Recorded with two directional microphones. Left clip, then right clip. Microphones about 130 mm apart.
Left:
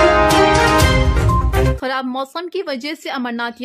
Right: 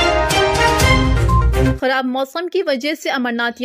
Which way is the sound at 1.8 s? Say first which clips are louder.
Right 4 dB; 20° right (ahead or behind).